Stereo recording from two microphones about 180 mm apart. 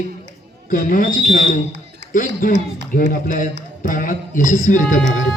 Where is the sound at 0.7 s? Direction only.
50° left (ahead or behind).